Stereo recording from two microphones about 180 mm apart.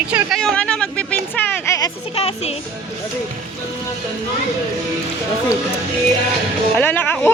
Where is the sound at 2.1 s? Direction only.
35° left (ahead or behind).